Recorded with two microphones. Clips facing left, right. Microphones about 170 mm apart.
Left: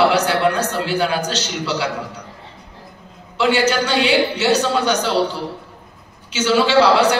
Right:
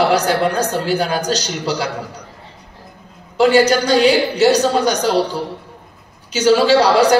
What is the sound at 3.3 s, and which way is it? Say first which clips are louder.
A man's voice: right 5 dB; 40° right (ahead or behind).